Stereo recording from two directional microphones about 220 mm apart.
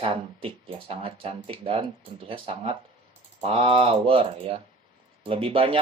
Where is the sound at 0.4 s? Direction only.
25° right (ahead or behind).